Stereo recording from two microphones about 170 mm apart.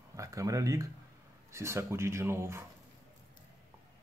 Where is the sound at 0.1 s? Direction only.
20° right (ahead or behind).